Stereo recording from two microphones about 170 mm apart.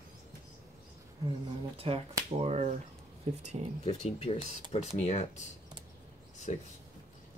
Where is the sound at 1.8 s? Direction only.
35° right (ahead or behind).